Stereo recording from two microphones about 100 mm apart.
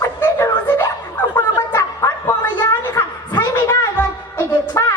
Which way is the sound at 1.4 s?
25° left (ahead or behind).